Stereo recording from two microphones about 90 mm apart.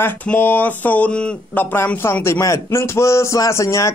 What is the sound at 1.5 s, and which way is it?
A man's voice, 25° left (ahead or behind).